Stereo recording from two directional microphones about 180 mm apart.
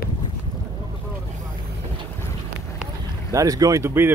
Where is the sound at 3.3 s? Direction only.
20° right (ahead or behind).